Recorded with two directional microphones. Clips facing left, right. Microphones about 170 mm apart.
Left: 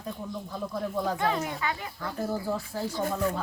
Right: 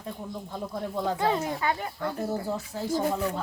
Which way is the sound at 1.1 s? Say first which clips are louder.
Right 5 dB; 30° right (ahead or behind).